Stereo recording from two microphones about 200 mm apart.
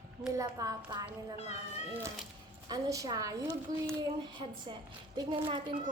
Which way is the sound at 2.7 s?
15° right (ahead or behind).